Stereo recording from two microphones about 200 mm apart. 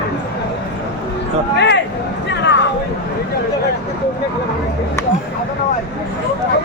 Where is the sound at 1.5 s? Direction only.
60° left (ahead or behind).